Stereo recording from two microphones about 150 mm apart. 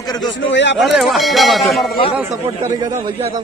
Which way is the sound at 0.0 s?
25° left (ahead or behind).